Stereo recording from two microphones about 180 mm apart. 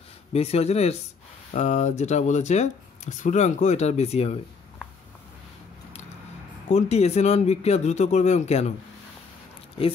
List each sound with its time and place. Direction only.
0.3 s speech: 35° left (ahead or behind)
6.7 s speech: 35° left (ahead or behind)